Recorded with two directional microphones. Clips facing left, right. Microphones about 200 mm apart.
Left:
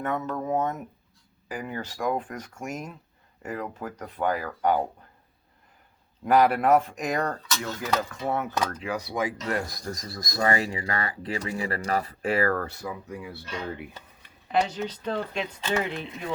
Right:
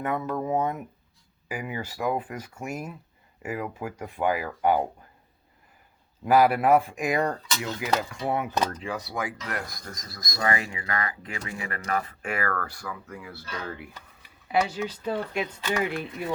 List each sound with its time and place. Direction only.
0.0 s speech: 10° right (ahead or behind)
6.2 s speech: 5° right (ahead or behind)
9.0 s speech: 20° left (ahead or behind)
14.2 s speech: 10° right (ahead or behind)